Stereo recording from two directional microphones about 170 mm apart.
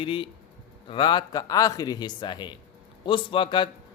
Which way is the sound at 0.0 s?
30° left (ahead or behind).